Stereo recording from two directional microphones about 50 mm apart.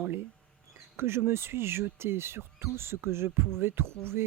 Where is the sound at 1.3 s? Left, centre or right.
Right.